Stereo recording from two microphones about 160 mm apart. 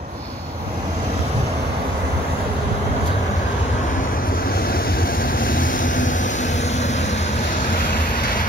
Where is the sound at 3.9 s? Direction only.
60° left (ahead or behind).